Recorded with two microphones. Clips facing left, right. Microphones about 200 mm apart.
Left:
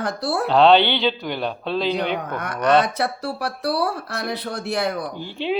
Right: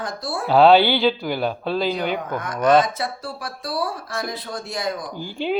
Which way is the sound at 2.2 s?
70° left (ahead or behind).